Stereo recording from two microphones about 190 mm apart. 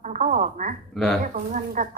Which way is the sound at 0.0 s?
40° right (ahead or behind).